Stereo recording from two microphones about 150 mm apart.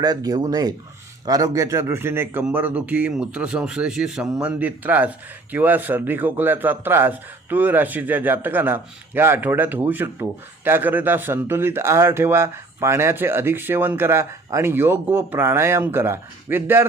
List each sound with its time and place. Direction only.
0.0 s speech: 25° right (ahead or behind)